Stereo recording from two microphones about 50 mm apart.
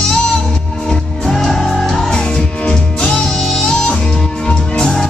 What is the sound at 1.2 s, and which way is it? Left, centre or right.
Music, centre.